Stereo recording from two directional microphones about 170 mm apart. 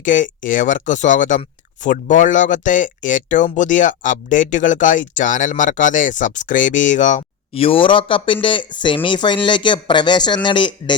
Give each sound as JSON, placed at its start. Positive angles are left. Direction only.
{"t": 0.0, "sound": "speech", "side_deg": 50}